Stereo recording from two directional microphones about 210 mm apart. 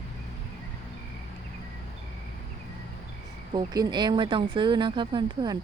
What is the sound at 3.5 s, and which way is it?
Speech, 20° right (ahead or behind).